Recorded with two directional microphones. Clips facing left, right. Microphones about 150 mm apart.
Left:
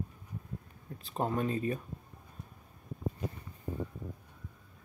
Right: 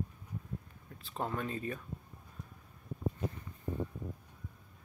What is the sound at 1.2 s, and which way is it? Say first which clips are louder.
Speech: left 5 dB; 30° left (ahead or behind).